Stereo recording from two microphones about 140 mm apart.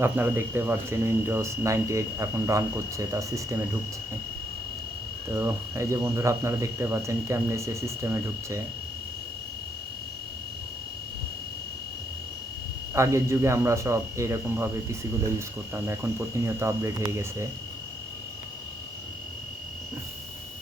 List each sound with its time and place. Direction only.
0.0 s speech: 15° right (ahead or behind)
5.4 s speech: 20° right (ahead or behind)
12.9 s speech: 20° right (ahead or behind)